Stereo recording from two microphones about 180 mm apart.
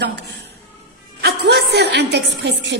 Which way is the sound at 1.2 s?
65° right (ahead or behind).